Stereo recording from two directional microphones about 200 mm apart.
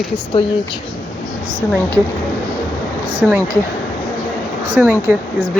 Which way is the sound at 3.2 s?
5° right (ahead or behind).